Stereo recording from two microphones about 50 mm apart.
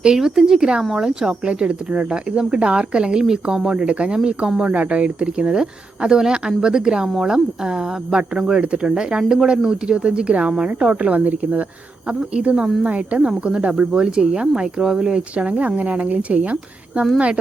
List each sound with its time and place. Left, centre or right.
0.0 s speech: centre
1.5 s speech: right
12.0 s speech: right